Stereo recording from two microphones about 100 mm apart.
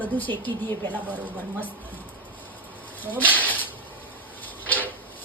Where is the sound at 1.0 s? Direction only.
15° right (ahead or behind).